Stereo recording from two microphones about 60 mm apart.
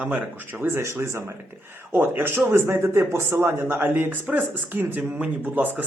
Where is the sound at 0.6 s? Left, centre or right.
Right.